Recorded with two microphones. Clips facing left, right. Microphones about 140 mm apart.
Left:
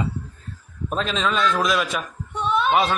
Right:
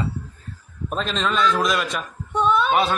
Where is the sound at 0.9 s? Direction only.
Centre (ahead or behind).